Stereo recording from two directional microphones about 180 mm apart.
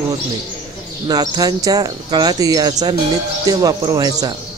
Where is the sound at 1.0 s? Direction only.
20° right (ahead or behind).